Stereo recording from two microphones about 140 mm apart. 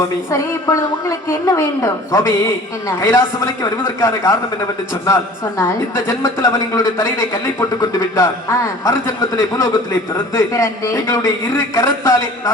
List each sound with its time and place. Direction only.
0.3 s a woman's voice: 20° left (ahead or behind)